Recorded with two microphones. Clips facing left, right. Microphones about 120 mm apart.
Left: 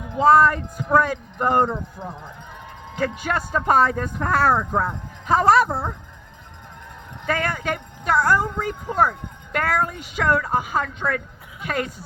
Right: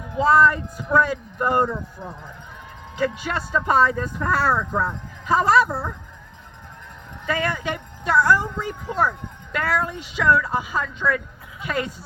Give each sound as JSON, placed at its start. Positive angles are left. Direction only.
{"t": 0.2, "sound": "speech", "side_deg": 45}
{"t": 2.9, "sound": "speech", "side_deg": 50}
{"t": 7.3, "sound": "speech", "side_deg": 45}